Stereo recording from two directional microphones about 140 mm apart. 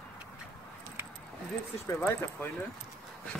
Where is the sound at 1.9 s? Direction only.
20° left (ahead or behind).